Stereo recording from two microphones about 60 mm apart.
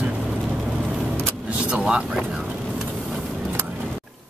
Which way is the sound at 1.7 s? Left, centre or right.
Centre.